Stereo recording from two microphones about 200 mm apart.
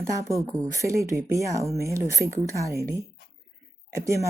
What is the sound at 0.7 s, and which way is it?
Speech, 15° right (ahead or behind).